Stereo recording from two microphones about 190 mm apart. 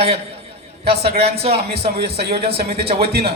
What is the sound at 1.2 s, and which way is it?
Speech, 30° right (ahead or behind).